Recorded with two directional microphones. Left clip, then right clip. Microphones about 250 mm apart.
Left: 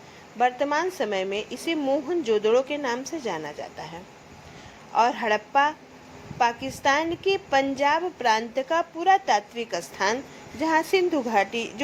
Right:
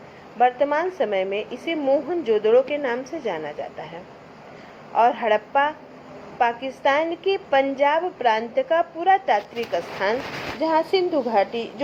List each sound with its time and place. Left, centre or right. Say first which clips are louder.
0.3 s a woman's voice: right 4 dB; left
4.9 s a woman's voice: right 3 dB; left